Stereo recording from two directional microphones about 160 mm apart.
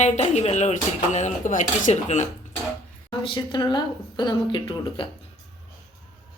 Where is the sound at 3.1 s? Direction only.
30° left (ahead or behind).